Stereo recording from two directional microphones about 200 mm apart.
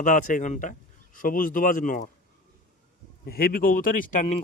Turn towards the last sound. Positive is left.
turn(degrees=35)  # may be behind; listen again after turning